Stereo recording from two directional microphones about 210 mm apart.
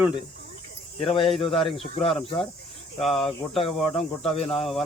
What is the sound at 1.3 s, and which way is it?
Speech, 25° left (ahead or behind).